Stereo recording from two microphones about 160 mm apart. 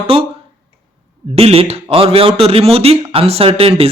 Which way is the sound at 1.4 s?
40° right (ahead or behind).